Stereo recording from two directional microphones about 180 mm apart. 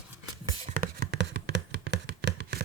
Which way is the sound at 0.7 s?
55° right (ahead or behind).